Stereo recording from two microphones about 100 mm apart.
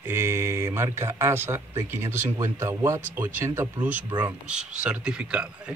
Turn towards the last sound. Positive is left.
turn(degrees=-10)  # may be behind; listen again after turning